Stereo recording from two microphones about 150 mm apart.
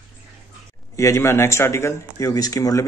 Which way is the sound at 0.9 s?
20° left (ahead or behind).